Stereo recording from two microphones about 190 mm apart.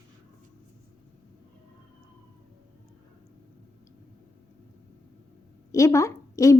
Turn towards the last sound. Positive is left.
turn(degrees=15)  # may be behind; listen again after turning